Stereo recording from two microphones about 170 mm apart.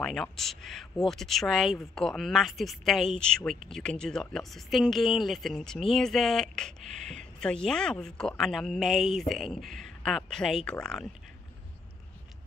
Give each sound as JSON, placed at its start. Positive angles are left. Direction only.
{"t": 0.0, "sound": "speech", "side_deg": 5}